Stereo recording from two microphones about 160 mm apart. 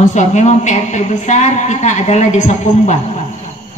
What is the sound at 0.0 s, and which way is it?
Speech, 45° left (ahead or behind).